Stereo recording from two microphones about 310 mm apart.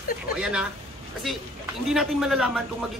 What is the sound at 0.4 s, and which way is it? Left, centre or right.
Speech, centre.